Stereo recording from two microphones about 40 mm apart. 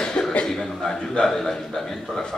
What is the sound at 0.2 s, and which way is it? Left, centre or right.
Cough, left.